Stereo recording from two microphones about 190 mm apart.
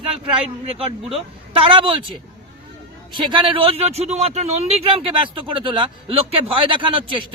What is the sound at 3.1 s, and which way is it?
A man's voice, 25° right (ahead or behind).